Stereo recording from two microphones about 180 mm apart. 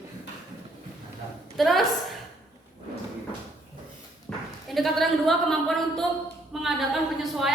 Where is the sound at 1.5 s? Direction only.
Centre (ahead or behind).